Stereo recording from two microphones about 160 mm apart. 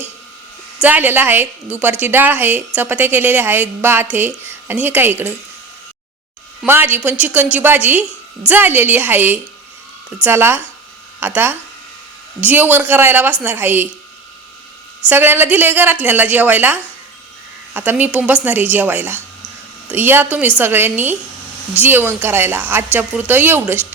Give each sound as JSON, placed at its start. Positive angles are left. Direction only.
{"t": 0.8, "sound": "a woman's voice", "side_deg": -10}
{"t": 6.7, "sound": "a woman's voice", "side_deg": -15}
{"t": 15.0, "sound": "a woman's voice", "side_deg": -15}